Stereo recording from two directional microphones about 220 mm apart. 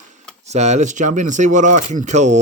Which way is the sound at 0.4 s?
30° right (ahead or behind).